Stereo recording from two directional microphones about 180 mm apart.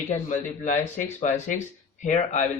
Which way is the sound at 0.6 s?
45° left (ahead or behind).